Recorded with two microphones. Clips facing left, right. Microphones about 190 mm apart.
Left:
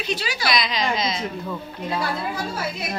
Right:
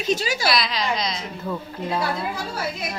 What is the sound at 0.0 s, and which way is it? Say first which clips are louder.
Speech: right 4 dB; 45° right (ahead or behind).